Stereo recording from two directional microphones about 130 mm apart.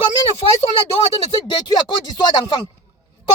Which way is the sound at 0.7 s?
50° left (ahead or behind).